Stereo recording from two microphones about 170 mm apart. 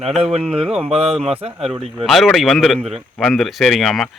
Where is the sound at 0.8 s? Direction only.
35° right (ahead or behind).